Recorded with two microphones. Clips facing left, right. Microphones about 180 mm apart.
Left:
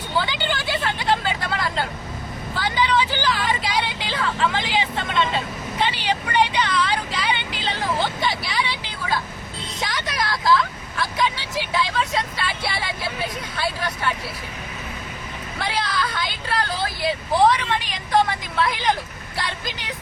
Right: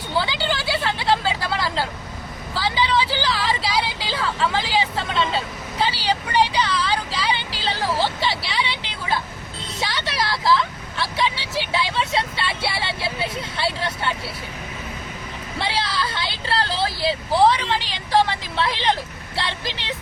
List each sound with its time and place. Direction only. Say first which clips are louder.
0.2 s vehicle: right 1 dB; 35° right (ahead or behind)
0.6 s vehicle: right 1 dB; 10° right (ahead or behind)
0.9 s vehicle: right 1 dB; 30° right (ahead or behind)
3.2 s vehicle: even; 30° right (ahead or behind)
4.6 s speech: right 2 dB; 35° right (ahead or behind)
5.8 s vehicle: right 1 dB; 35° right (ahead or behind)
9.8 s speech: right 1 dB; 30° right (ahead or behind)
15.5 s speech: even; 30° right (ahead or behind)